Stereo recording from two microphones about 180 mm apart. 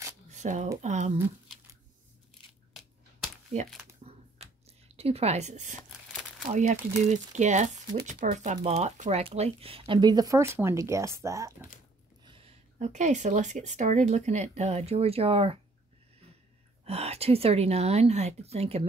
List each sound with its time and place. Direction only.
0.3 s a sound: 40° right (ahead or behind)
0.8 s speech: 40° right (ahead or behind)
4.0 s a sound: 35° right (ahead or behind)
6.4 s speech: 40° right (ahead or behind); by 11.5 s 15° right (ahead or behind)
12.3 s speech: 35° right (ahead or behind)
16.8 s speech: 35° right (ahead or behind)